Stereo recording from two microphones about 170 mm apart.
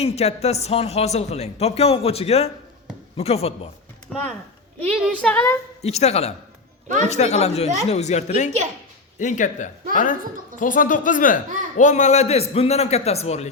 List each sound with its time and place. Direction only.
0.0 s speech: 40° left (ahead or behind)
4.1 s speech: centre (ahead or behind)
5.3 s a woman's voice: 10° left (ahead or behind)
5.8 s speech: 40° left (ahead or behind)
6.8 s speech: 45° right (ahead or behind)
7.1 s speech: 40° left (ahead or behind)